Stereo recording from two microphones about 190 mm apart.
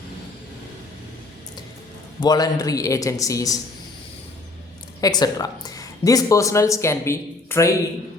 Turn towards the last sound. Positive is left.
turn(degrees=15)  # may be behind; listen again after turning